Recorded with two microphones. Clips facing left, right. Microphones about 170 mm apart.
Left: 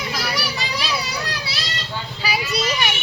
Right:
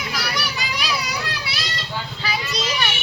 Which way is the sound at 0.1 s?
30° left (ahead or behind).